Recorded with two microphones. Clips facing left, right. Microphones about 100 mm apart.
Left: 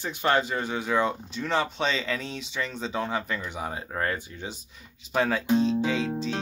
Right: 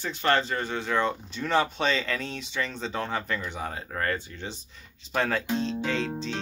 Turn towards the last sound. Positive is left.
turn(degrees=5)  # may be behind; listen again after turning